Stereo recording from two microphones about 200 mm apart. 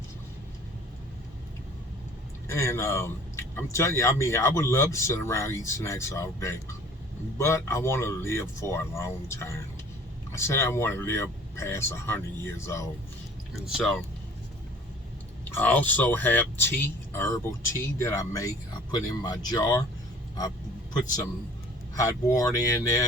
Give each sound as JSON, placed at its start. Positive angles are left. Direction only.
{"t": 2.5, "sound": "a man's voice", "side_deg": 15}
{"t": 13.7, "sound": "speech", "side_deg": 0}
{"t": 15.4, "sound": "a man's voice", "side_deg": 10}
{"t": 21.9, "sound": "a man's voice", "side_deg": 15}